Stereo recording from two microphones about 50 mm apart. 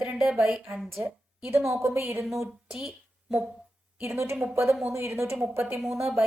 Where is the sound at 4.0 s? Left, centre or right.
Right.